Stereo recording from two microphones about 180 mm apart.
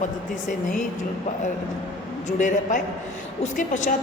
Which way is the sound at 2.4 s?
45° left (ahead or behind).